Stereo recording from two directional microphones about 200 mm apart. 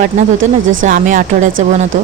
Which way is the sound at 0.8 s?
40° right (ahead or behind).